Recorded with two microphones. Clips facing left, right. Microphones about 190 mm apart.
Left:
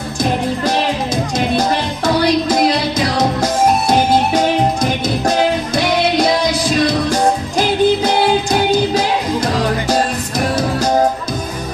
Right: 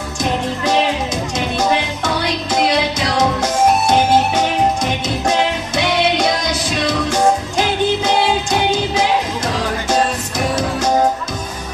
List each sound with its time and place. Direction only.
7.1 s music: 35° left (ahead or behind)